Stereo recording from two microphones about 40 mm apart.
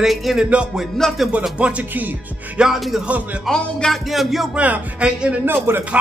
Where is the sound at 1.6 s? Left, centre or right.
Right.